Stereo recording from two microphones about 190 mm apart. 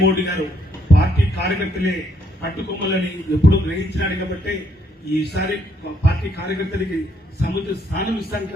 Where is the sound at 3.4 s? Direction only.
60° left (ahead or behind).